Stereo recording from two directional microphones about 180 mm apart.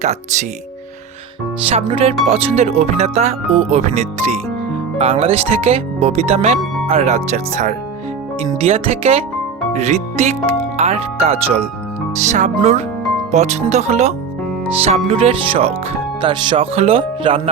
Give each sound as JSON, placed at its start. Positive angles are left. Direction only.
{"t": 0.0, "sound": "speech", "side_deg": -40}
{"t": 1.7, "sound": "speech", "side_deg": -35}